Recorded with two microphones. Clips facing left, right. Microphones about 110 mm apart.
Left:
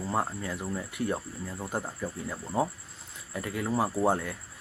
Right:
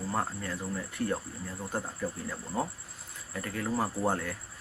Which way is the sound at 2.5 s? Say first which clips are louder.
Left 5 dB; 20° left (ahead or behind).